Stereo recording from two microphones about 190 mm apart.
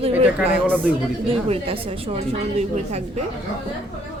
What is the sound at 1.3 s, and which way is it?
A woman's voice, 30° right (ahead or behind).